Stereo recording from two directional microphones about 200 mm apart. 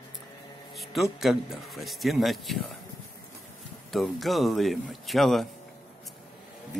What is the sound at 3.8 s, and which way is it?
A man's voice, centre (ahead or behind).